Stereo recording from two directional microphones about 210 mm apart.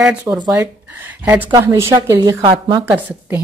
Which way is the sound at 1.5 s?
15° right (ahead or behind).